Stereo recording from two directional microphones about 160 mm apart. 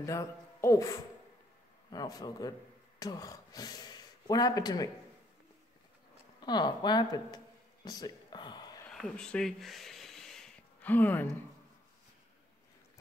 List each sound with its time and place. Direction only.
0.0 s speech: 20° left (ahead or behind)
6.4 s speech: 25° left (ahead or behind)
8.9 s a sound: 5° left (ahead or behind)